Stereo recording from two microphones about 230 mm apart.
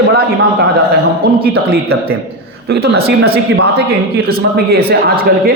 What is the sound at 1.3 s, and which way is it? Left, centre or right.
A man's voice, right.